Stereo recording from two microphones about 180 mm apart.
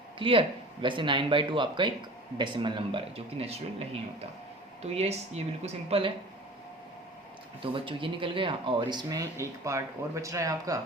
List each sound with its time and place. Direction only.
0.2 s speech: 30° right (ahead or behind)
7.6 s speech: 30° right (ahead or behind)